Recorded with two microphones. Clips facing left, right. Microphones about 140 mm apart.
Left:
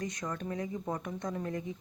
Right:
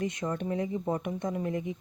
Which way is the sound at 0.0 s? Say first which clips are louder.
Right 5 dB; 25° right (ahead or behind).